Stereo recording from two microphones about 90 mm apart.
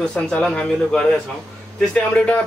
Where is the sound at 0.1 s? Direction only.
10° left (ahead or behind).